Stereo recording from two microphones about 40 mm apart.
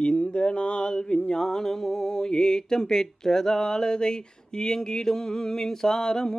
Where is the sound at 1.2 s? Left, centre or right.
Centre.